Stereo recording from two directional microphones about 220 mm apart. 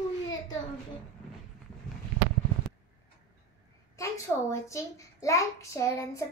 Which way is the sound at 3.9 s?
15° left (ahead or behind).